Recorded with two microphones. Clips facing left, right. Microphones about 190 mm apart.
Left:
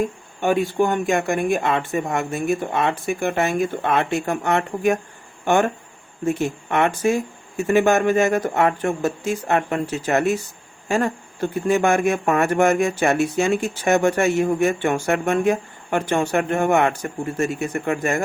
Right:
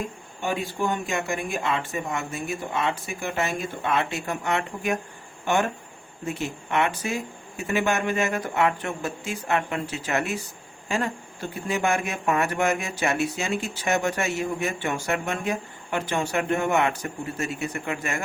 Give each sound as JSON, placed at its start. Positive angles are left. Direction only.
{"t": 0.4, "sound": "speech", "side_deg": 55}
{"t": 6.2, "sound": "speech", "side_deg": 50}